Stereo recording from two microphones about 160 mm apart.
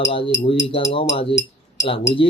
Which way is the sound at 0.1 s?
35° left (ahead or behind).